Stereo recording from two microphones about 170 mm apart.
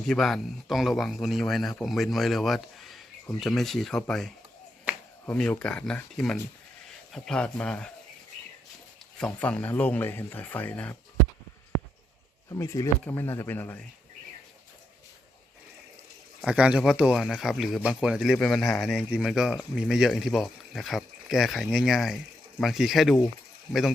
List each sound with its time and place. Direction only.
0.1 s speech: centre (ahead or behind)
9.1 s speech: 5° left (ahead or behind)
12.5 s speech: 20° left (ahead or behind)
16.4 s speech: 5° right (ahead or behind)